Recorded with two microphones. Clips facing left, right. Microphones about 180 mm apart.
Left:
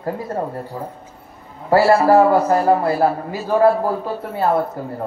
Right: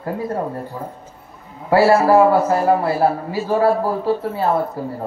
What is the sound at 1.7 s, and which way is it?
Speech, 35° left (ahead or behind).